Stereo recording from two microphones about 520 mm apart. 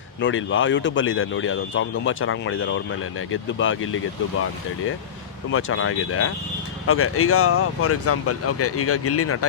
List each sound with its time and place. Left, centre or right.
0.2 s speech: left
5.5 s speech: left